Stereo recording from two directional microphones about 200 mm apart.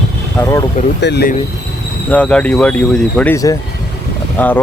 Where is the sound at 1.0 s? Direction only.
60° left (ahead or behind).